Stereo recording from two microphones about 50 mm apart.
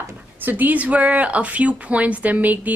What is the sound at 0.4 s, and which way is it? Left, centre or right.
Speech, right.